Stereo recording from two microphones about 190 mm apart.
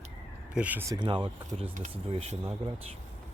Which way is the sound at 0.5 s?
10° right (ahead or behind).